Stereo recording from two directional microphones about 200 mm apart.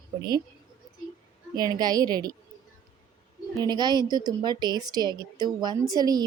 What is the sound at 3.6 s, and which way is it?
A woman's voice, 20° right (ahead or behind).